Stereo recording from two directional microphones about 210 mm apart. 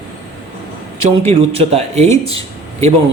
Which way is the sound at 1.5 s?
30° right (ahead or behind).